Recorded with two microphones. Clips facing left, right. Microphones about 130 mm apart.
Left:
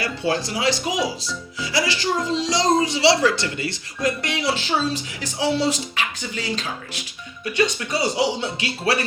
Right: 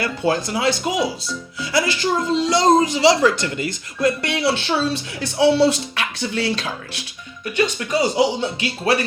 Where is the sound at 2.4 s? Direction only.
55° right (ahead or behind).